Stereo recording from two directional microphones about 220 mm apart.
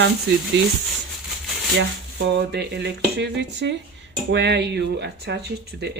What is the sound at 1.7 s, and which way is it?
Speech, 50° right (ahead or behind).